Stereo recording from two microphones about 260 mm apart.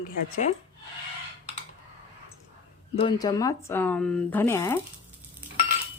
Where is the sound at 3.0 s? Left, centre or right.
Centre.